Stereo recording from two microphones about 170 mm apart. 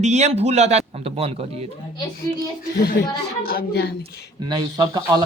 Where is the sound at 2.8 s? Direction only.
65° left (ahead or behind).